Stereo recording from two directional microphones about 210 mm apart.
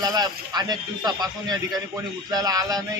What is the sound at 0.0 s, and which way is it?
A man's voice, 20° right (ahead or behind).